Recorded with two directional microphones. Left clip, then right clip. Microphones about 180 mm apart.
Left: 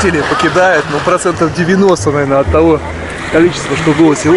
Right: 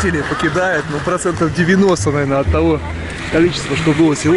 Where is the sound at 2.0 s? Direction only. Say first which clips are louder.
Left 5 dB; 15° right (ahead or behind).